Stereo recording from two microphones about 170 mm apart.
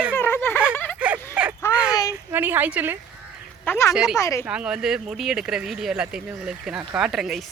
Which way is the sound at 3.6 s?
15° left (ahead or behind).